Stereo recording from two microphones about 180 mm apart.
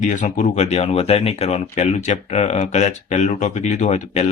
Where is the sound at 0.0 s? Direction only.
45° left (ahead or behind).